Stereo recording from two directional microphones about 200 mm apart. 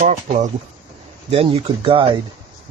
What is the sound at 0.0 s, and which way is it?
Speech, 40° right (ahead or behind).